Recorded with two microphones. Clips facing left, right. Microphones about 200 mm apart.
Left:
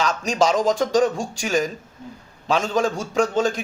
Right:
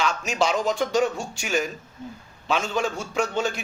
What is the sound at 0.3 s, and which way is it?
Speech, 40° left (ahead or behind).